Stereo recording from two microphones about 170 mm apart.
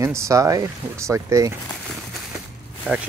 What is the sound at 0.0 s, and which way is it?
Speech, 15° right (ahead or behind).